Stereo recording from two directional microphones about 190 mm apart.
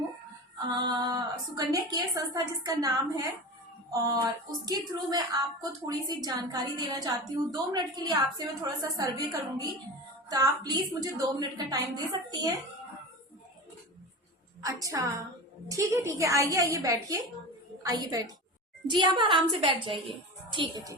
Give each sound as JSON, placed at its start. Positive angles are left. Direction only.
{"t": 0.7, "sound": "a woman's voice", "side_deg": -20}
{"t": 14.6, "sound": "a woman's voice", "side_deg": -15}